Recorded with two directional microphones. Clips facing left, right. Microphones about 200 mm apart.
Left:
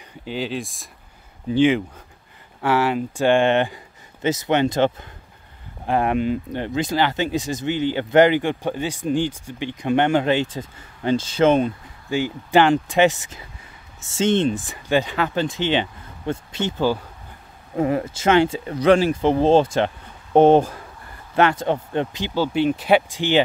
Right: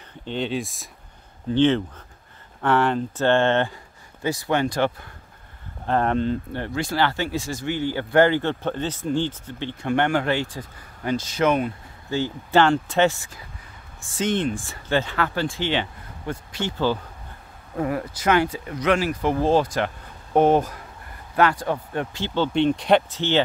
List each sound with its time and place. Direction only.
0.2 s speech: 5° left (ahead or behind)
1.5 s speech: 10° left (ahead or behind)
5.9 s speech: 10° left (ahead or behind); by 11.7 s 25° left (ahead or behind)
12.1 s speech: 15° left (ahead or behind)